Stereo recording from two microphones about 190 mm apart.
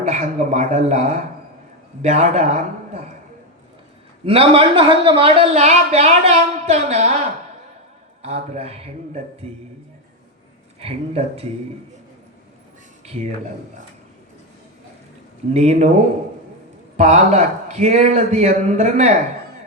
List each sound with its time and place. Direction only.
0.0 s a woman's voice: 35° right (ahead or behind)
4.3 s a woman's voice: 30° right (ahead or behind)
8.2 s a woman's voice: 30° right (ahead or behind)
10.8 s a woman's voice: 30° right (ahead or behind)
15.5 s a woman's voice: 35° right (ahead or behind)
17.0 s a woman's voice: 35° right (ahead or behind)